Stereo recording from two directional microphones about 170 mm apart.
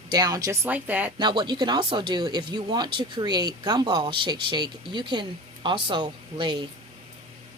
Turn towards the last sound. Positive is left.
turn(degrees=-30)  # may be behind; listen again after turning